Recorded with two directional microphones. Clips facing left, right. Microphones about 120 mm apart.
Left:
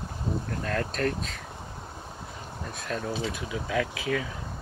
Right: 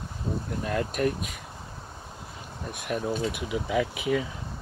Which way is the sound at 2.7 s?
15° right (ahead or behind).